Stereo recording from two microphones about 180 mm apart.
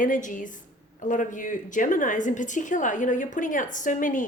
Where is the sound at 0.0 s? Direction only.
45° left (ahead or behind).